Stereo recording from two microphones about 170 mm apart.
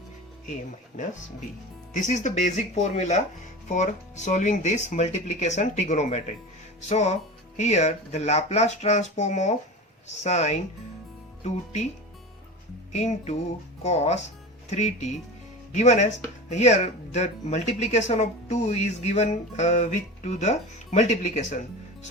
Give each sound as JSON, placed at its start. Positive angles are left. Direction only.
{"t": 1.9, "sound": "speech", "side_deg": 45}
{"t": 12.9, "sound": "speech", "side_deg": 40}